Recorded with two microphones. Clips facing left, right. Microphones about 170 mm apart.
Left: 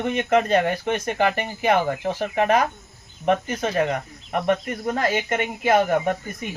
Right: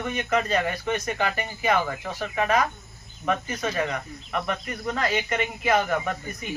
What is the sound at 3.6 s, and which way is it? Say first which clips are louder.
Speech: left 5 dB; 50° left (ahead or behind).